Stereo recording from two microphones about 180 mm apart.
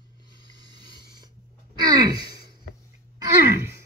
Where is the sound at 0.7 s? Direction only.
25° right (ahead or behind).